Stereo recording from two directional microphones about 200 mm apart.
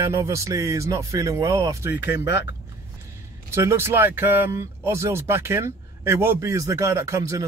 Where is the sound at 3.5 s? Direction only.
15° right (ahead or behind).